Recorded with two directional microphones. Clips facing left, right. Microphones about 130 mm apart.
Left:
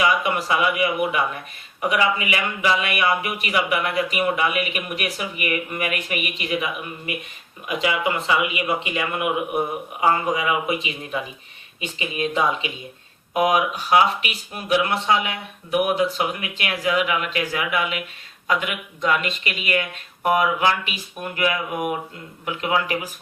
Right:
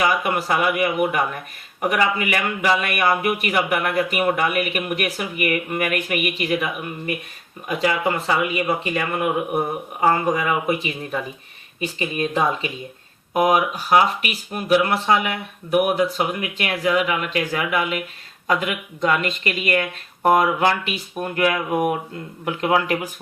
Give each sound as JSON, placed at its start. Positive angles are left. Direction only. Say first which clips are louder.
{"t": 0.0, "sound": "a man's voice", "louder": "even", "side_deg": -40}